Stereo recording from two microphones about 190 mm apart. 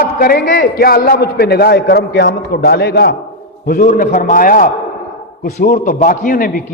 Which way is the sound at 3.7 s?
45° left (ahead or behind).